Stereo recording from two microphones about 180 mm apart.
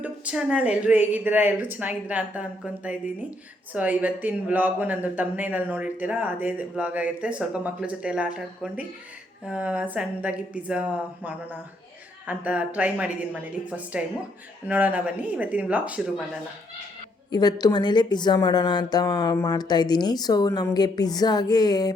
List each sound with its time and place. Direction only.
0.0 s speech: 5° right (ahead or behind)
17.3 s speech: 20° left (ahead or behind)